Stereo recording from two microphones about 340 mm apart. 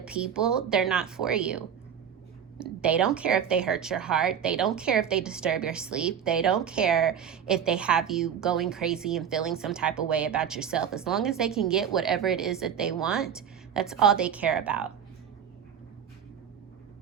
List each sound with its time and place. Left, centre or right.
0.0 s speech: centre
2.6 s speech: centre